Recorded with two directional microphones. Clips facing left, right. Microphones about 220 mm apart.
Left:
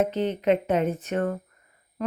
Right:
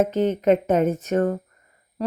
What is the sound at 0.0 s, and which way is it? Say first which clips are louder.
Speech: right 4 dB; 45° right (ahead or behind).